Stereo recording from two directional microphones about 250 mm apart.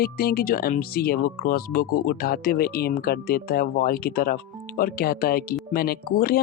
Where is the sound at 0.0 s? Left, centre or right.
Left.